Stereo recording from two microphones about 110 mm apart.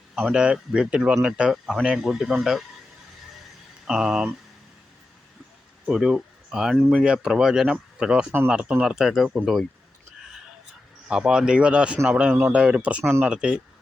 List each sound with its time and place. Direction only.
0.2 s speech: 5° right (ahead or behind)
3.8 s speech: 5° right (ahead or behind)
5.8 s speech: 5° right (ahead or behind)
11.1 s speech: 5° right (ahead or behind)